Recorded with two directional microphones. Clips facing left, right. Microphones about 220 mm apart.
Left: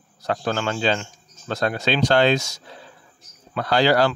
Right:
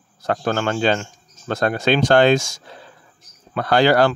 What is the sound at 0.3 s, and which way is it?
Speech, 50° right (ahead or behind).